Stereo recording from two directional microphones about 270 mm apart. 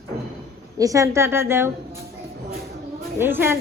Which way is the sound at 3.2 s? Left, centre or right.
Centre.